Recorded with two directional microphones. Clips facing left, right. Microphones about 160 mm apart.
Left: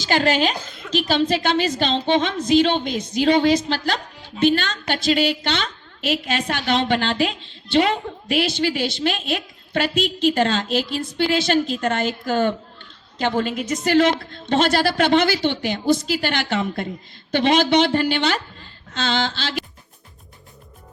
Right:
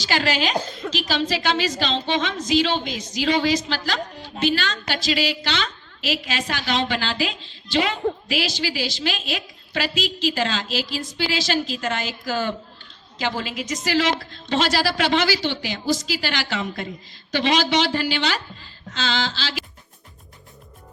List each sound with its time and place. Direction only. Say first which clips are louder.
0.0 s a woman's voice: left 4 dB; 50° left (ahead or behind)